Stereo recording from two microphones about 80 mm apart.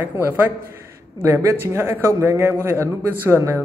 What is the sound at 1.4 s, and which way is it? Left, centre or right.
A man's voice, right.